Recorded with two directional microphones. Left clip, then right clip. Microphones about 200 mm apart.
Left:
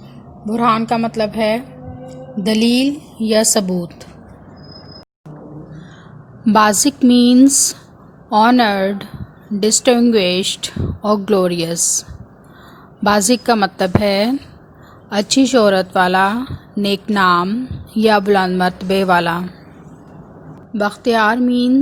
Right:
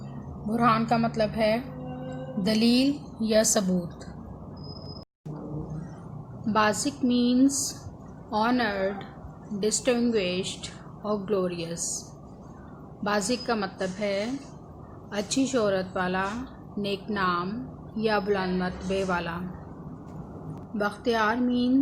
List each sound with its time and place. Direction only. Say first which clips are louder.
0.5 s a woman's voice: left 8 dB; 40° left (ahead or behind)
6.4 s a woman's voice: left 12 dB; 50° left (ahead or behind)
13.1 s a woman's voice: left 13 dB; 50° left (ahead or behind)
20.7 s a woman's voice: left 11 dB; 45° left (ahead or behind)